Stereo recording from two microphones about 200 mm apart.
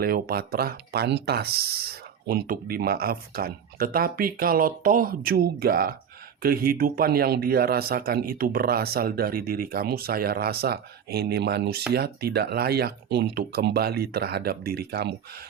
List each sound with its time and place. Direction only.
0.0 s speech: 50° right (ahead or behind)